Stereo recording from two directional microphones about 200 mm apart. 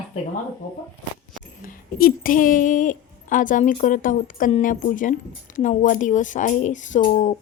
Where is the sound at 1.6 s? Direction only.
45° left (ahead or behind).